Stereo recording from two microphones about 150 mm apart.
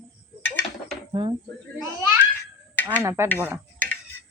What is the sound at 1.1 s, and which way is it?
Speech, 35° right (ahead or behind).